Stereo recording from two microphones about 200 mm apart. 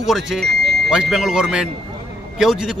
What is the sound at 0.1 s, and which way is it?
Speech, centre (ahead or behind).